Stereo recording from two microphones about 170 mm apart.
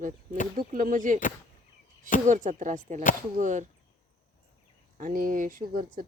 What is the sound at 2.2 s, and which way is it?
Speech, 50° right (ahead or behind).